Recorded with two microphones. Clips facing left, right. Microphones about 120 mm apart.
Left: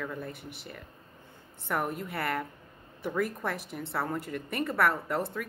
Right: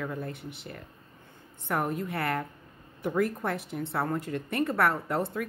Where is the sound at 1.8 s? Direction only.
Centre (ahead or behind).